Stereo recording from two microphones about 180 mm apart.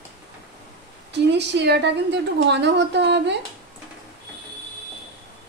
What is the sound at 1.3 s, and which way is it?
A woman's voice, 70° right (ahead or behind).